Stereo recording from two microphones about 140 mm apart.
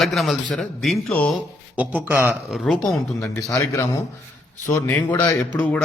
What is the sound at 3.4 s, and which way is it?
A man's voice, 25° left (ahead or behind).